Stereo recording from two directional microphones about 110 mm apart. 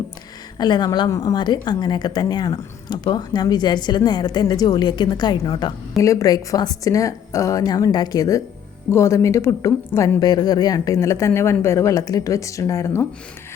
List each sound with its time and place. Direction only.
0.6 s a woman's voice: 40° left (ahead or behind)
6.0 s a woman's voice: 30° left (ahead or behind)